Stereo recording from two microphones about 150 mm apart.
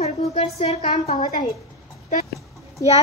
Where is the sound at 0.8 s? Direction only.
55° left (ahead or behind).